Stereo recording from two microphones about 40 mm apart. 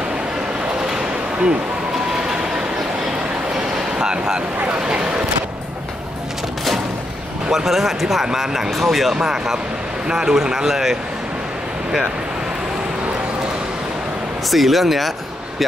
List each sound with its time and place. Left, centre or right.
4.0 s a sound: centre
4.8 s speech: centre
7.5 s speech: centre
14.5 s speech: centre